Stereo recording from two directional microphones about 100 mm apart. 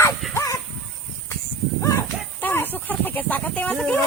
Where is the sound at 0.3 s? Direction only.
30° left (ahead or behind).